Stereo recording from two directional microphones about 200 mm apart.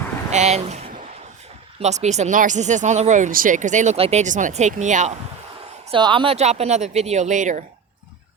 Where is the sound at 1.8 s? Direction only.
35° right (ahead or behind).